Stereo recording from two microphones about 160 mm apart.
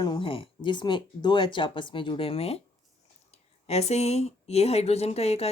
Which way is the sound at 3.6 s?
40° left (ahead or behind).